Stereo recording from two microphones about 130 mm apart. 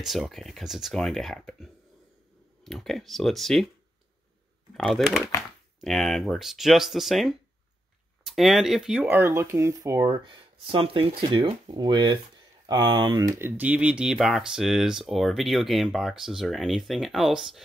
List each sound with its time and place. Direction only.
0.0 s speech: centre (ahead or behind)
4.7 s speech: centre (ahead or behind)
9.2 s speech: 20° right (ahead or behind)
13.4 s speech: 15° right (ahead or behind)